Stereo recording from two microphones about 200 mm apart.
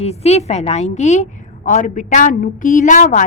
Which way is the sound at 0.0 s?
30° left (ahead or behind).